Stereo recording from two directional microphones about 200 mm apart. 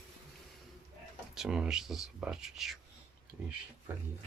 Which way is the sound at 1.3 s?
5° right (ahead or behind).